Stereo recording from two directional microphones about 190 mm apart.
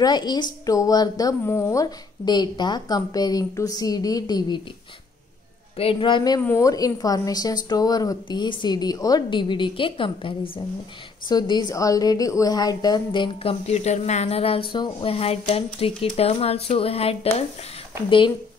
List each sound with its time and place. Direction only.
0.0 s a woman's voice: 20° left (ahead or behind)
5.8 s a woman's voice: 30° left (ahead or behind)